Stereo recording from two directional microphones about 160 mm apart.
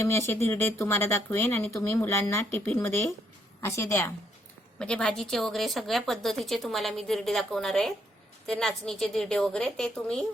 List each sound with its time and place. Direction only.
0.0 s speech: 15° left (ahead or behind)
4.8 s a woman's voice: 5° left (ahead or behind)